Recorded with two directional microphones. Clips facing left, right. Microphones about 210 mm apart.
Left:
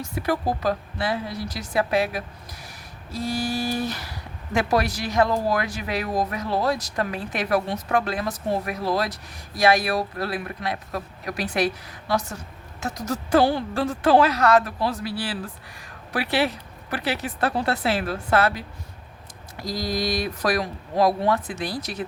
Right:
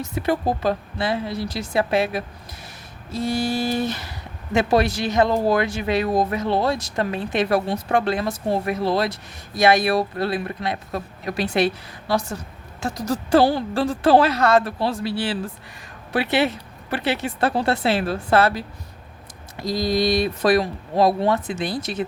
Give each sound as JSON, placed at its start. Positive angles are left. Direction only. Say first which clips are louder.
{"t": 0.0, "sound": "speech", "louder": "right 3 dB", "side_deg": -25}